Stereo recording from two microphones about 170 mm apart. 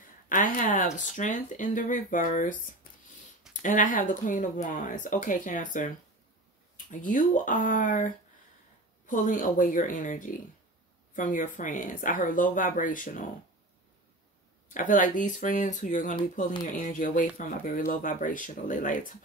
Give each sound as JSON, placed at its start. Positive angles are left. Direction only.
{"t": 0.3, "sound": "speech", "side_deg": 50}
{"t": 3.6, "sound": "speech", "side_deg": 50}
{"t": 14.7, "sound": "speech", "side_deg": 50}